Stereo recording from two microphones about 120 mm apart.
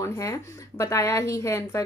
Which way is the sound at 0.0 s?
25° left (ahead or behind).